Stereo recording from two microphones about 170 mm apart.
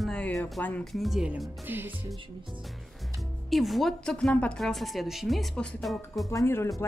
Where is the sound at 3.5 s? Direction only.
Centre (ahead or behind).